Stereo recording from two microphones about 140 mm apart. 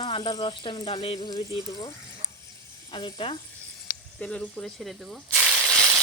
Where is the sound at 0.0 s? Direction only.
35° left (ahead or behind).